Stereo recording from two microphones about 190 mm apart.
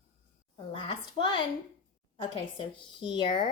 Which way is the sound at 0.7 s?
25° left (ahead or behind).